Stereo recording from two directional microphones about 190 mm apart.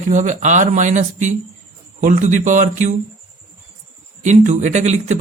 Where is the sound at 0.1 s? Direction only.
40° right (ahead or behind).